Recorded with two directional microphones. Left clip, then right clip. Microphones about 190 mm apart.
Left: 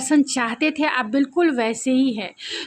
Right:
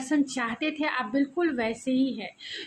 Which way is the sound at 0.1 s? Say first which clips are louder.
Left 8 dB; 55° left (ahead or behind).